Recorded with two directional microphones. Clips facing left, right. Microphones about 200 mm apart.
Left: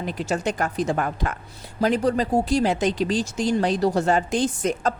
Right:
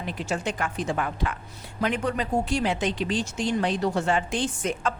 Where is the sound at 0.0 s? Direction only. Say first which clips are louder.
Left 4 dB; 40° left (ahead or behind).